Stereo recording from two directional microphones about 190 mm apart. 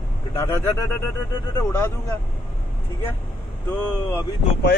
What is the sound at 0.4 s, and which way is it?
Speech, 15° left (ahead or behind).